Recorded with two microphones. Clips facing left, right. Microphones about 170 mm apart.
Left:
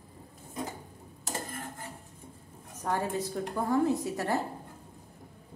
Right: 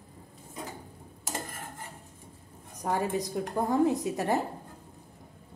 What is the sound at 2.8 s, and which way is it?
A woman's voice, 15° right (ahead or behind).